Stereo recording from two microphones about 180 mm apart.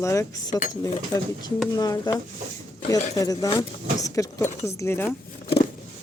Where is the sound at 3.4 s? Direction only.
20° left (ahead or behind).